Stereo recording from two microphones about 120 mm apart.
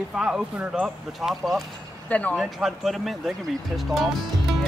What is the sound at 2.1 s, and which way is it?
Speech, 10° left (ahead or behind).